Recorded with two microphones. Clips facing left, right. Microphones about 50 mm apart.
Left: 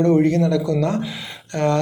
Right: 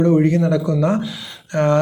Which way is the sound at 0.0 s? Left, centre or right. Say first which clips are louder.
Right 1 dB; centre.